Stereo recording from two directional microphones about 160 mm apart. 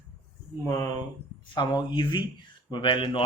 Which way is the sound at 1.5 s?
25° left (ahead or behind).